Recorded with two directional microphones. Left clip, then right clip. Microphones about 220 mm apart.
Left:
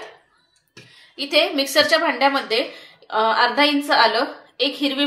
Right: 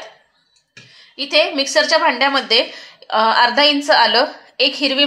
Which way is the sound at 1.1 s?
55° right (ahead or behind).